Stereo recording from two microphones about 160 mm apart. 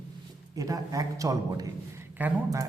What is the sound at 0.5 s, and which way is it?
A man's voice, 20° right (ahead or behind).